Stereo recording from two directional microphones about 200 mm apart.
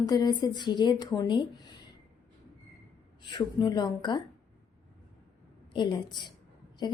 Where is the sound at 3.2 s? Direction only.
20° left (ahead or behind).